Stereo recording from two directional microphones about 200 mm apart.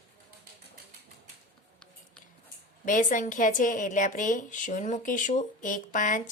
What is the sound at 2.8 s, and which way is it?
A woman's voice, 40° left (ahead or behind).